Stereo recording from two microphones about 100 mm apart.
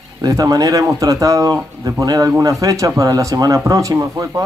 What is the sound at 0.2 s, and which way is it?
Speech, 35° right (ahead or behind).